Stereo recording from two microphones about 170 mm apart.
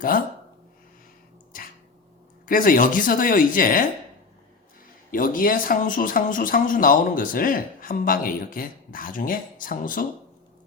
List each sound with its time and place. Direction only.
2.5 s speech: 55° left (ahead or behind)
5.1 s speech: 55° left (ahead or behind)